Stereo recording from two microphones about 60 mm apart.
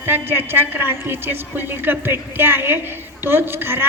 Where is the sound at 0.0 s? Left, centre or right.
Right.